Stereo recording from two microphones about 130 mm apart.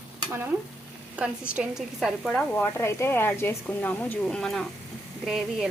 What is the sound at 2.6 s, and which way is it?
Speech, 20° left (ahead or behind).